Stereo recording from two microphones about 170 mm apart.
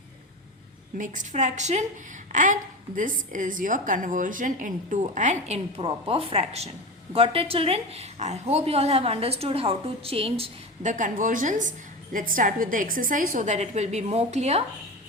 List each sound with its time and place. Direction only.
0.9 s a woman's voice: 50° right (ahead or behind)
10.9 s a woman's voice: 50° right (ahead or behind)